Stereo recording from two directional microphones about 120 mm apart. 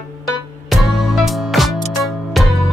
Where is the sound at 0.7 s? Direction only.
Centre (ahead or behind).